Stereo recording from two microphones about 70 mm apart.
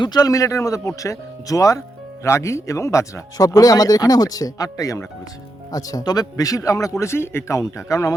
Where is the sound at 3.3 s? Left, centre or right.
Left.